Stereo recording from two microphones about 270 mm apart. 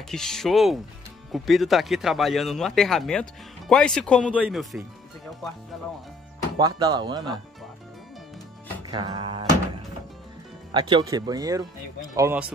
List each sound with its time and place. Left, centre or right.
0.1 s speech: centre
6.6 s speech: centre
8.9 s speech: centre
10.7 s speech: centre